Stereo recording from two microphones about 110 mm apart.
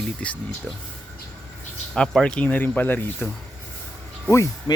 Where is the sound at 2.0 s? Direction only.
10° left (ahead or behind).